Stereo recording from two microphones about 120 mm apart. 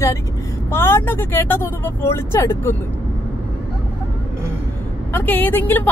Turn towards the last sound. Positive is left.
turn(degrees=15)  # may be behind; listen again after turning